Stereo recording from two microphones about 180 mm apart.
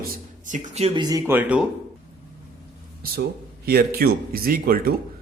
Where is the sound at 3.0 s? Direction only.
60° right (ahead or behind).